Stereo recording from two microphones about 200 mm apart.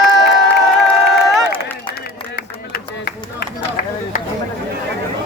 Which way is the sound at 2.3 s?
50° left (ahead or behind).